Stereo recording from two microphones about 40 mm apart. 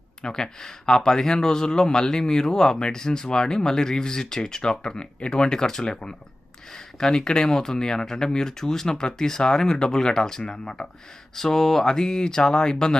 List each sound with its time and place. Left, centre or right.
0.2 s speech: centre
11.3 s speech: centre